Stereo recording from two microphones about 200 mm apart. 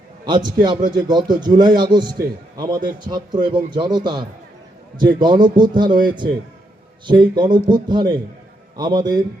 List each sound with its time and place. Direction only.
0.3 s a man's voice: 20° right (ahead or behind)